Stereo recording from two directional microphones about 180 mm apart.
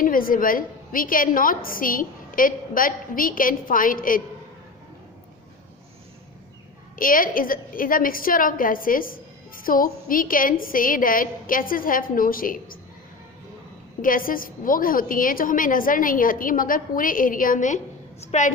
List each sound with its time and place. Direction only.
0.0 s a woman's voice: 50° left (ahead or behind)
6.9 s a woman's voice: 50° left (ahead or behind)
14.0 s a woman's voice: 50° left (ahead or behind)